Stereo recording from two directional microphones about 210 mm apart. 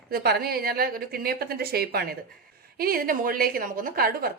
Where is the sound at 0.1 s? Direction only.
45° right (ahead or behind).